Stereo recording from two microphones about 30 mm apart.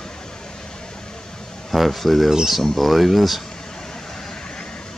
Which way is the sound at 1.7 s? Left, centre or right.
Centre.